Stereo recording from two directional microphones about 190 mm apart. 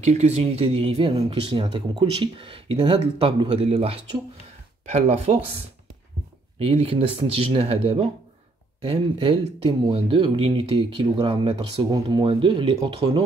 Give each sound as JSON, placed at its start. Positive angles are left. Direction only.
{"t": 0.0, "sound": "speech", "side_deg": -35}
{"t": 6.6, "sound": "speech", "side_deg": -30}